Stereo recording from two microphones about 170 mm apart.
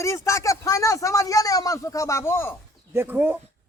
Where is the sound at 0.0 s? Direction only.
15° left (ahead or behind).